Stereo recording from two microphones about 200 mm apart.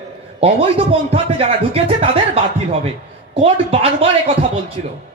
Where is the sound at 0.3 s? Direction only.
30° right (ahead or behind).